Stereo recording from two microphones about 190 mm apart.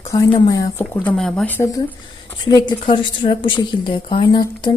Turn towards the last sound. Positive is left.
turn(degrees=25)  # may be behind; listen again after turning